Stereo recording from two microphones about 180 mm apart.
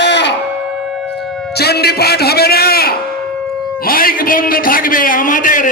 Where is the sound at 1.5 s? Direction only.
65° left (ahead or behind).